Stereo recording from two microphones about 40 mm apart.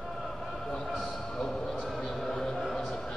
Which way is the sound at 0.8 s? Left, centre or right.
Centre.